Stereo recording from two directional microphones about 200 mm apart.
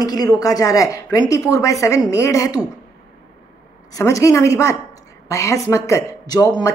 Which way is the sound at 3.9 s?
15° left (ahead or behind).